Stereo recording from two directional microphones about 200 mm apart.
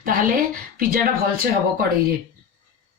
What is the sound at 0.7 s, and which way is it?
Speech, 45° right (ahead or behind).